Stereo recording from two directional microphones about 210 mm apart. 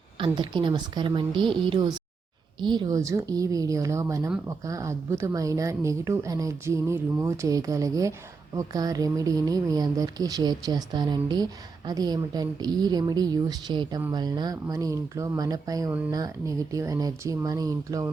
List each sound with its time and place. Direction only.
0.2 s a woman's voice: 20° right (ahead or behind)